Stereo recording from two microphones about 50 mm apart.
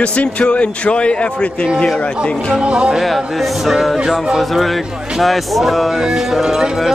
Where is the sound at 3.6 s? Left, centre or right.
Centre.